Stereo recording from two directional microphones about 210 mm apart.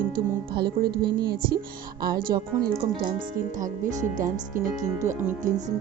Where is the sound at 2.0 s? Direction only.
45° right (ahead or behind).